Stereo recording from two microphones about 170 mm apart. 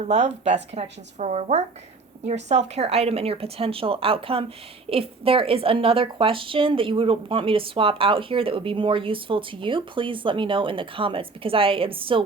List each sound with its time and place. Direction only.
0.0 s speech: 40° right (ahead or behind)